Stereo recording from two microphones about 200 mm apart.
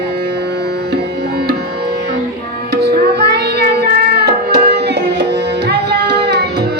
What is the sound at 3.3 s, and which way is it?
Music, 55° right (ahead or behind).